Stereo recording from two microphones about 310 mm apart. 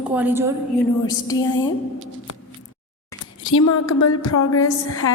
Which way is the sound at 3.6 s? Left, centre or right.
Left.